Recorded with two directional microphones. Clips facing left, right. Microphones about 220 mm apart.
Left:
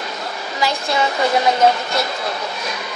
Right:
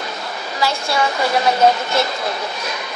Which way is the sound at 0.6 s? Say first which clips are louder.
Even; 15° left (ahead or behind).